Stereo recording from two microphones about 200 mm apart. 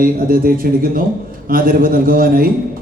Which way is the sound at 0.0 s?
45° right (ahead or behind).